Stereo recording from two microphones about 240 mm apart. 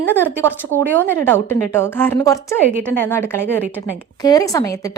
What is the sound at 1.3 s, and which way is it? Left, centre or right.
A woman's voice, centre.